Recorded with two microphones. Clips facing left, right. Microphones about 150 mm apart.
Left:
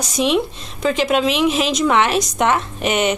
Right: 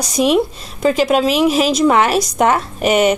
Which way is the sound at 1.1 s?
40° right (ahead or behind).